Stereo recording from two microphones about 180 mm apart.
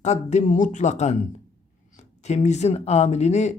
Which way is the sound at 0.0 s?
40° left (ahead or behind).